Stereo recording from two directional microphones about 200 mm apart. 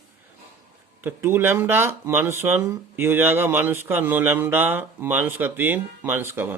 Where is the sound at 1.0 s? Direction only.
10° right (ahead or behind).